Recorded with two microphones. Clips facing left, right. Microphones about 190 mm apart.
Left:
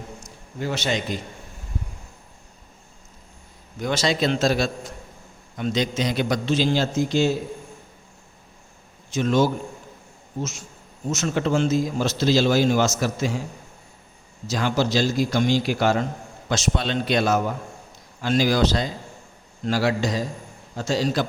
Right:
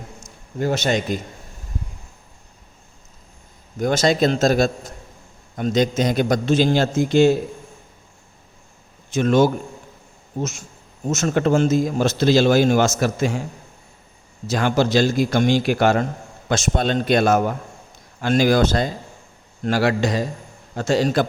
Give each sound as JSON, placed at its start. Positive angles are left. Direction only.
{"t": 0.6, "sound": "a man's voice", "side_deg": -45}
{"t": 3.8, "sound": "a man's voice", "side_deg": -45}
{"t": 9.0, "sound": "a man's voice", "side_deg": -55}
{"t": 11.1, "sound": "a man's voice", "side_deg": -50}
{"t": 14.4, "sound": "a man's voice", "side_deg": -55}
{"t": 19.6, "sound": "a man's voice", "side_deg": -60}